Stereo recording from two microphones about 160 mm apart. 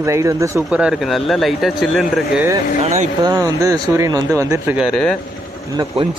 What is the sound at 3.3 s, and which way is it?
Speech, 20° right (ahead or behind).